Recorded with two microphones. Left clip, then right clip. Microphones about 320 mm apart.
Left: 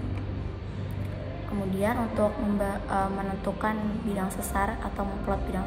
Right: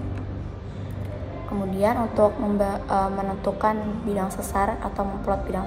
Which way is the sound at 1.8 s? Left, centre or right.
Right.